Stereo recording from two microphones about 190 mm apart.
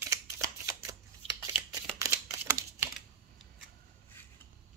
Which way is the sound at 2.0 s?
15° right (ahead or behind).